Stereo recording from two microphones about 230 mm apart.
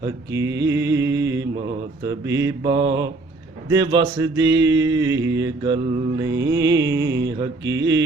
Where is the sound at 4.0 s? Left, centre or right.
Centre.